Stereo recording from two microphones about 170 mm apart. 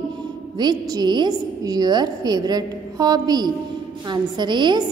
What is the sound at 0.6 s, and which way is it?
A woman's voice, 25° right (ahead or behind).